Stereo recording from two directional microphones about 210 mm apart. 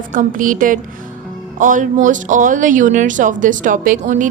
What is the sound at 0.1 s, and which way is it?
Speech, 40° right (ahead or behind).